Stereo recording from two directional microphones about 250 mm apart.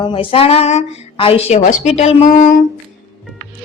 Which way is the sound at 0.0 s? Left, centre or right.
Centre.